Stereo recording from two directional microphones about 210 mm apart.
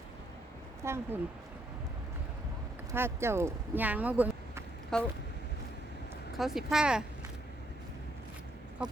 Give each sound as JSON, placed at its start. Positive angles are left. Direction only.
{"t": 0.9, "sound": "speech", "side_deg": -10}
{"t": 2.9, "sound": "speech", "side_deg": -10}
{"t": 4.9, "sound": "speech", "side_deg": 5}
{"t": 6.3, "sound": "speech", "side_deg": 0}